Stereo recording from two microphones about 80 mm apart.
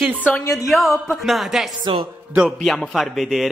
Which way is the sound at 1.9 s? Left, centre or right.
Right.